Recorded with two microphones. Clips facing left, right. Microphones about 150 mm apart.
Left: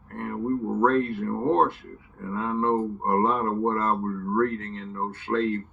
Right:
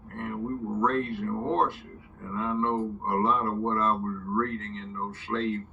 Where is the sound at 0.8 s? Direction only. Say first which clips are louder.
Left 4 dB; 55° left (ahead or behind).